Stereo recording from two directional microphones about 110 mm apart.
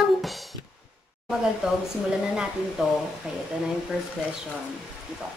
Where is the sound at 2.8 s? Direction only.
5° right (ahead or behind).